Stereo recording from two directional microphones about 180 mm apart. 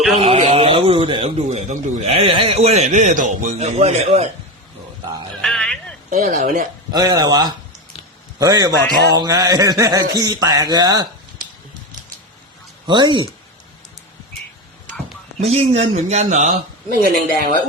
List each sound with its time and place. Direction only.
0.2 s a man's voice: 35° right (ahead or behind)
5.4 s a sound: 5° left (ahead or behind)
6.1 s speech: 45° right (ahead or behind)
6.9 s speech: 20° right (ahead or behind)
12.9 s speech: 25° right (ahead or behind)
15.4 s a man's voice: 35° right (ahead or behind); by 17.7 s 55° right (ahead or behind)